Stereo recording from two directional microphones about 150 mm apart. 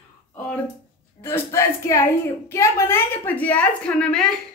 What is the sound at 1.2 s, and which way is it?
Speech, 15° left (ahead or behind).